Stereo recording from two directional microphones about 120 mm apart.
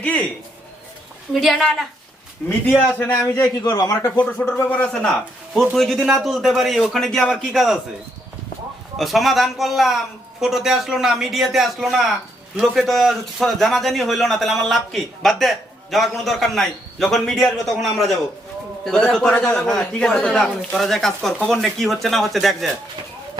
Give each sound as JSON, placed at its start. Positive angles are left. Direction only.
{"t": 0.0, "sound": "a man's voice", "side_deg": 10}
{"t": 1.3, "sound": "a man's voice", "side_deg": 0}
{"t": 2.5, "sound": "a man's voice", "side_deg": 15}
{"t": 4.3, "sound": "a man's voice", "side_deg": 10}
{"t": 9.0, "sound": "a man's voice", "side_deg": 0}